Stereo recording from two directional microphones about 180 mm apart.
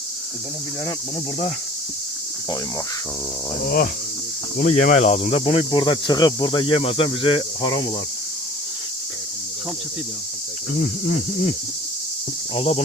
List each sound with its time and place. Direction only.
4.5 s speech: 45° left (ahead or behind); by 7.8 s 25° left (ahead or behind)
12.5 s speech: 35° left (ahead or behind)